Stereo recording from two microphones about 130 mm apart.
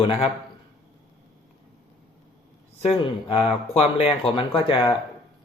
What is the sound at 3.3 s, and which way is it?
Speech, 50° left (ahead or behind).